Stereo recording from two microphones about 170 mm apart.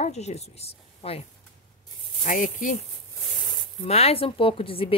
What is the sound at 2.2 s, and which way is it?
Speech, 50° left (ahead or behind).